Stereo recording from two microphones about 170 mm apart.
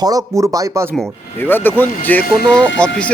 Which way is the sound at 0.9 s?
5° left (ahead or behind).